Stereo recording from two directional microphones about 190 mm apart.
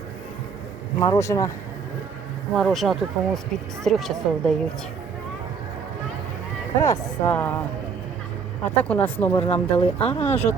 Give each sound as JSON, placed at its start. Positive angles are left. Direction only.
{"t": 0.9, "sound": "speech", "side_deg": 15}
{"t": 2.6, "sound": "speech", "side_deg": 0}
{"t": 6.8, "sound": "speech", "side_deg": 15}
{"t": 8.6, "sound": "speech", "side_deg": 10}
{"t": 9.5, "sound": "speech", "side_deg": 30}